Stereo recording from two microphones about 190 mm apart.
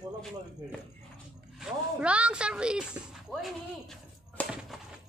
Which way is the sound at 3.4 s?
Centre (ahead or behind).